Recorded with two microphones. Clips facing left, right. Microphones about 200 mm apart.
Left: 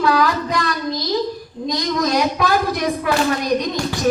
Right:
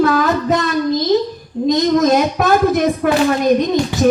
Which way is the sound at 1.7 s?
50° right (ahead or behind).